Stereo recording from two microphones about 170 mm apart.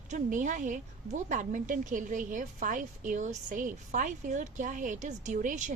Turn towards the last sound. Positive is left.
turn(degrees=-50)  # may be behind; listen again after turning